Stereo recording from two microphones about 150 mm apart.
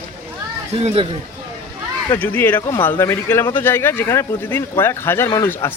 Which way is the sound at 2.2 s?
15° left (ahead or behind).